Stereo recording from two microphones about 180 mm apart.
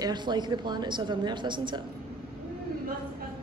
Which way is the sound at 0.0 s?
25° right (ahead or behind).